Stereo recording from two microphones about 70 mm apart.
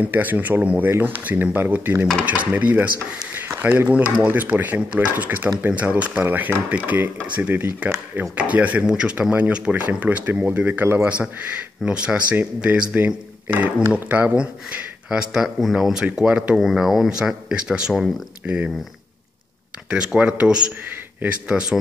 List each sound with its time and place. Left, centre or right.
0.0 s speech: right
11.0 s speech: centre
16.6 s speech: centre
18.4 s speech: right
20.2 s speech: centre
20.9 s a sound: right
21.5 s speech: centre